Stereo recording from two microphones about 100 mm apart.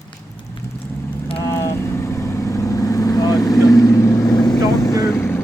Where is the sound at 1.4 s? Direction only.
30° left (ahead or behind).